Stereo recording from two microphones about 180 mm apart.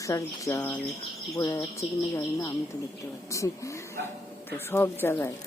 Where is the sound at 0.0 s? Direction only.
15° left (ahead or behind).